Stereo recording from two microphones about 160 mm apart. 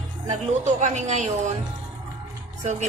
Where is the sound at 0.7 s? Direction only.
50° right (ahead or behind).